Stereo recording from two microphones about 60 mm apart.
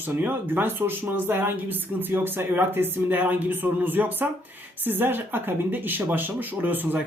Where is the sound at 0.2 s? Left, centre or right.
Right.